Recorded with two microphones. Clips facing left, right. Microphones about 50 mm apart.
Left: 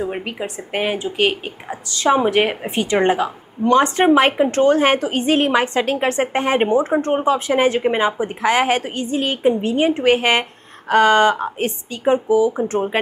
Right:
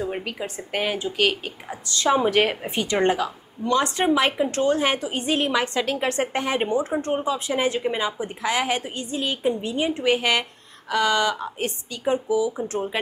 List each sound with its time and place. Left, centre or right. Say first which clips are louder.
0.0 s a woman's voice: left 4 dB; left
2.6 s a woman's voice: left 4 dB; left